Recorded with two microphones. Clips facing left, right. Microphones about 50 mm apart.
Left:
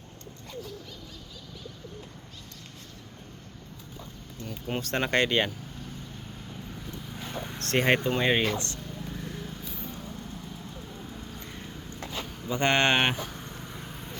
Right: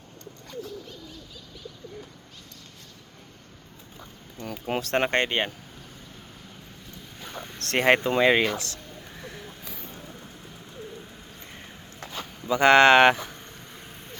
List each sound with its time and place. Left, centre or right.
4.5 s speech: right
4.9 s speech: right
7.2 s vehicle: centre
7.7 s speech: right
8.0 s speech: right
9.2 s vehicle: centre
11.5 s a sound: centre
12.5 s speech: right
13.3 s vehicle: centre